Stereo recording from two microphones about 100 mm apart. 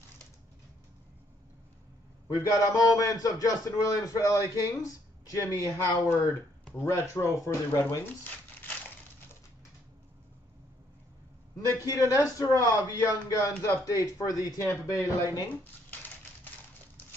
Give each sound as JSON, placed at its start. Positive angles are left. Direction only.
{"t": 2.2, "sound": "a man's voice", "side_deg": 35}
{"t": 8.2, "sound": "crumpling", "side_deg": 20}
{"t": 11.5, "sound": "a man's voice", "side_deg": 35}